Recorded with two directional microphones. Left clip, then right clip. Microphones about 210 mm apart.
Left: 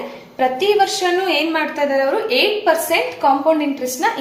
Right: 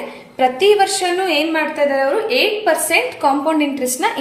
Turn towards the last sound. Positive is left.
turn(degrees=-25)  # may be behind; listen again after turning